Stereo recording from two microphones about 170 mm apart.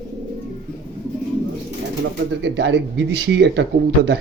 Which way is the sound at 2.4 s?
90° right.